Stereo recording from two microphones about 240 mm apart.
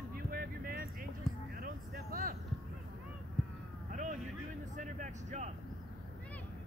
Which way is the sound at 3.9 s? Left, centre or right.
Right.